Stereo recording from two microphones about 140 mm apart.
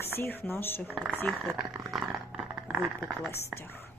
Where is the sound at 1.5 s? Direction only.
5° right (ahead or behind).